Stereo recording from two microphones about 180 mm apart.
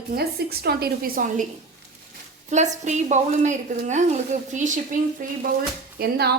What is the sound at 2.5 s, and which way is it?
A woman's voice, 40° right (ahead or behind).